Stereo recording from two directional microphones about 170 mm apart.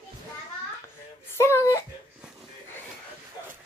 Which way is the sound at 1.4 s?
15° left (ahead or behind).